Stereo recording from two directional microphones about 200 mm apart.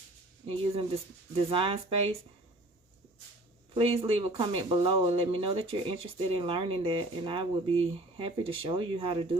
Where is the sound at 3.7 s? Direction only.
30° right (ahead or behind).